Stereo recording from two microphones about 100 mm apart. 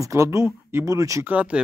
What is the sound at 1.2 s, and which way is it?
Speech, 15° right (ahead or behind).